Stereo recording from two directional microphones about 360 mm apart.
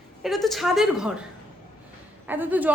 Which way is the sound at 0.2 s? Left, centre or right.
Centre.